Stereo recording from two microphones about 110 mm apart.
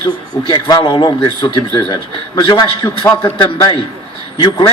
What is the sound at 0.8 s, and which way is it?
Speech, 50° left (ahead or behind).